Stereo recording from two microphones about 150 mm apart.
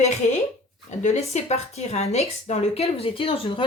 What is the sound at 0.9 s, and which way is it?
A woman's voice, 50° left (ahead or behind).